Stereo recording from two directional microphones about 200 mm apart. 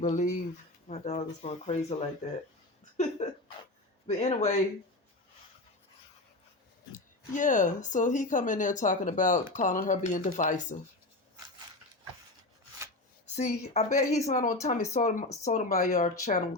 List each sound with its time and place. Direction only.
0.0 s speech: 40° left (ahead or behind)
3.2 s a sound: 35° left (ahead or behind)
4.0 s speech: 30° left (ahead or behind)
7.3 s speech: 40° left (ahead or behind)
13.3 s speech: 35° left (ahead or behind)